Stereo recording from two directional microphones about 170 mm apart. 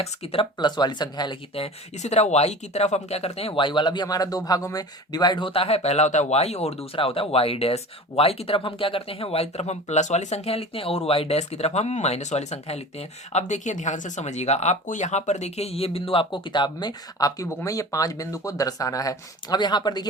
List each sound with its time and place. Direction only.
0.0 s speech: 35° left (ahead or behind)